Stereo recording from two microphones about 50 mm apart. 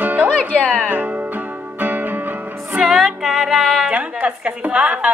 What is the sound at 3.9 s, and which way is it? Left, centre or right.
Music, right.